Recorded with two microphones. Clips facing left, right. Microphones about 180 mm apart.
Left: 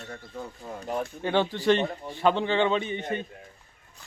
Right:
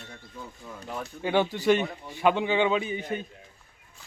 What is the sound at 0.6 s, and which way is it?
Speech, 40° left (ahead or behind).